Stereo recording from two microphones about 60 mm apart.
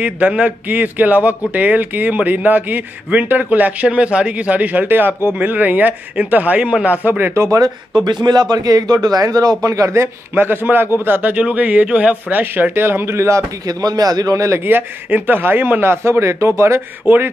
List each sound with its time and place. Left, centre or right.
0.0 s a man's voice: right
8.3 s a man's voice: right
10.3 s a man's voice: right
11.3 s a man's voice: right
13.7 s a man's voice: right
14.6 s a man's voice: right
17.0 s a man's voice: right